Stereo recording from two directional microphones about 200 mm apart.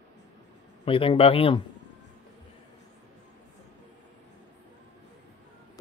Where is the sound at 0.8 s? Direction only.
25° left (ahead or behind).